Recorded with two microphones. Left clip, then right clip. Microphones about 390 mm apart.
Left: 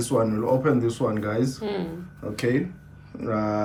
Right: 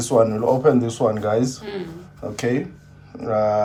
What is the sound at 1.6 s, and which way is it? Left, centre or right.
Speech, centre.